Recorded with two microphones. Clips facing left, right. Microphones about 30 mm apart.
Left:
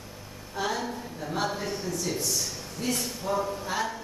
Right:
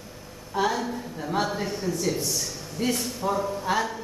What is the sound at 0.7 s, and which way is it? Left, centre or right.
A man's voice, centre.